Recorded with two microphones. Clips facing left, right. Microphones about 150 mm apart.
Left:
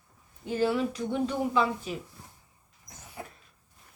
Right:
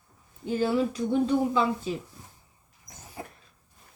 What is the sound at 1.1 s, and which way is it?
Speech, 30° right (ahead or behind).